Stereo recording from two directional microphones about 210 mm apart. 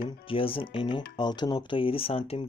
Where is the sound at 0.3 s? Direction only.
25° left (ahead or behind).